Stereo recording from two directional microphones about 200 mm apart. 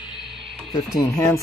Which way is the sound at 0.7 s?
15° left (ahead or behind).